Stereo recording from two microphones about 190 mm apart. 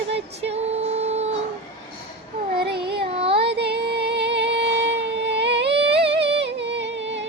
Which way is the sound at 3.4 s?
60° right (ahead or behind).